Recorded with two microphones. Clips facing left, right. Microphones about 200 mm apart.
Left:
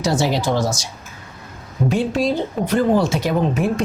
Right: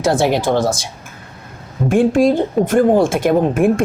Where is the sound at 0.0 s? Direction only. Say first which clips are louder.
Right 4 dB; 55° right (ahead or behind).